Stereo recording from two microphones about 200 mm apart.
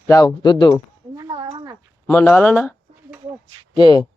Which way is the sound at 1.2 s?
25° right (ahead or behind).